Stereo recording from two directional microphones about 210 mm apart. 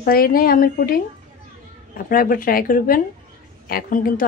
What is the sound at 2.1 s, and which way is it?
A woman's voice, 45° left (ahead or behind).